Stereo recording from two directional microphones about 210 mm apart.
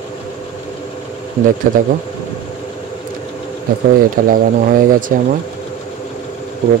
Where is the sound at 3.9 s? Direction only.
45° right (ahead or behind).